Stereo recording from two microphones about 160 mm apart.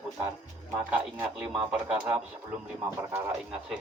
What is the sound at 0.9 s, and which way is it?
A man's voice, 10° right (ahead or behind).